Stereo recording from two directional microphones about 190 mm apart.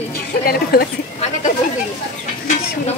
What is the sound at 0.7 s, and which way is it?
Speech, 55° left (ahead or behind).